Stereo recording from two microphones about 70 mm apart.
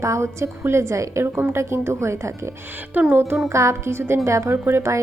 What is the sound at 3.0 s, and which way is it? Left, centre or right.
Speech, right.